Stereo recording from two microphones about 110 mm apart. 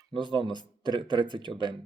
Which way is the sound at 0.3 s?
45° right (ahead or behind).